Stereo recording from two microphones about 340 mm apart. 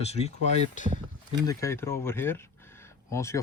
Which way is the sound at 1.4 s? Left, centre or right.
Centre.